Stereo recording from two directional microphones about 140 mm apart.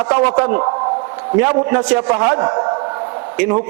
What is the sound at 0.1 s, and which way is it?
A man's voice, 15° right (ahead or behind).